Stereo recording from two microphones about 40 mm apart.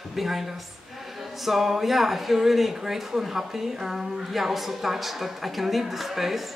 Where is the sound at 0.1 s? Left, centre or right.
Centre.